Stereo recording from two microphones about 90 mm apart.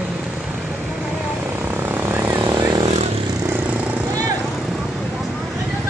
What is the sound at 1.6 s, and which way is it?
Vehicle, 20° right (ahead or behind).